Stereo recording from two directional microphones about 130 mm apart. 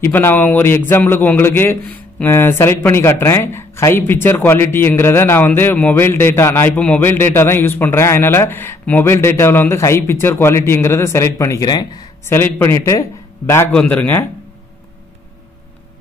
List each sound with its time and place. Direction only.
0.0 s a man's voice: 15° left (ahead or behind)
12.3 s a man's voice: 15° left (ahead or behind)
13.7 s a man's voice: 10° left (ahead or behind)